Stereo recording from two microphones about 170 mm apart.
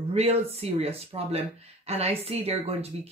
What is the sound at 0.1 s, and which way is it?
Speech, 40° right (ahead or behind).